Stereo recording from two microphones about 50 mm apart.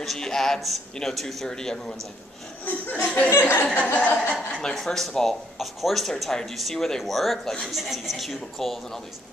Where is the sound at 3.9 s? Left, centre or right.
Left.